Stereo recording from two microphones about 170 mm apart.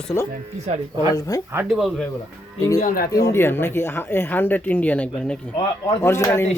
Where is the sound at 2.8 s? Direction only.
60° left (ahead or behind).